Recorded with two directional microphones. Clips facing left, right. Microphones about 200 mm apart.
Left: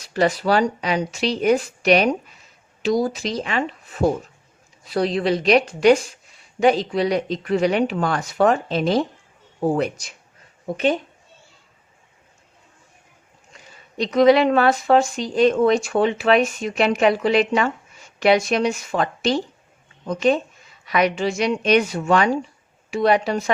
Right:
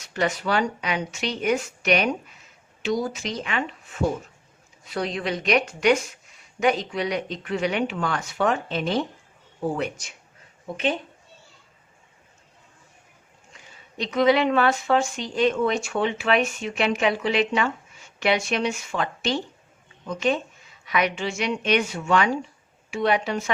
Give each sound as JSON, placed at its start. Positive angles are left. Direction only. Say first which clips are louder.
{"t": 0.0, "sound": "speech", "louder": "left 6 dB", "side_deg": 35}
{"t": 13.9, "sound": "speech", "louder": "left 5 dB", "side_deg": 35}